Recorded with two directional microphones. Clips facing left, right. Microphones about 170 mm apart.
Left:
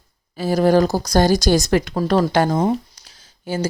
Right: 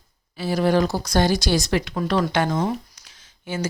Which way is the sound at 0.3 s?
45° left (ahead or behind).